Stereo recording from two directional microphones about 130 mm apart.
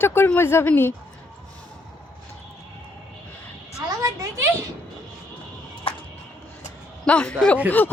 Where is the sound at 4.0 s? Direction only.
25° right (ahead or behind).